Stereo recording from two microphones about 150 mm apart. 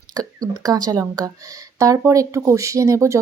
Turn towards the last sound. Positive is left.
turn(degrees=-20)  # may be behind; listen again after turning